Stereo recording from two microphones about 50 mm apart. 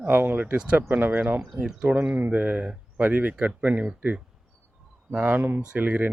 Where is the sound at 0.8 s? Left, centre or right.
Right.